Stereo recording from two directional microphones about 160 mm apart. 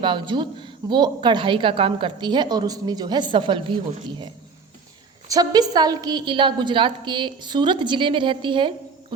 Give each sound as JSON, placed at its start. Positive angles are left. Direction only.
{"t": 0.0, "sound": "a woman's voice", "side_deg": -30}
{"t": 5.3, "sound": "a woman's voice", "side_deg": -25}